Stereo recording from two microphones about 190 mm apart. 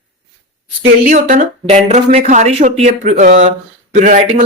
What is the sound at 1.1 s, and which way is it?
Speech, 40° right (ahead or behind).